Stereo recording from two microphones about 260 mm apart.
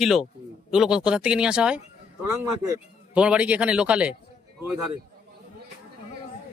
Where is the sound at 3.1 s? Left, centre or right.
Centre.